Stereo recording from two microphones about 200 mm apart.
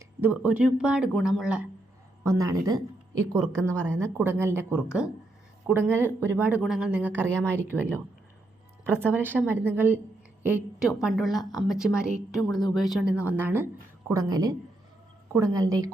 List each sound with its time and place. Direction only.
0.2 s speech: 10° right (ahead or behind)
2.2 s a woman's voice: 15° right (ahead or behind)
12.5 s speech: 20° left (ahead or behind)
12.7 s a woman's voice: centre (ahead or behind); by 14.5 s 20° right (ahead or behind)
15.5 s a woman's voice: 15° right (ahead or behind)